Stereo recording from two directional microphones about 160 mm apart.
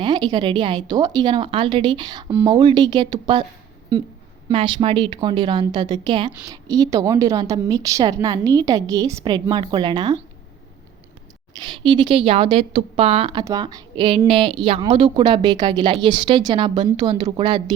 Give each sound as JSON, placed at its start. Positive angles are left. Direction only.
{"t": 0.0, "sound": "a woman's voice", "side_deg": -25}
{"t": 4.4, "sound": "a woman's voice", "side_deg": -30}
{"t": 11.6, "sound": "a woman's voice", "side_deg": -30}
{"t": 13.4, "sound": "a woman's voice", "side_deg": -25}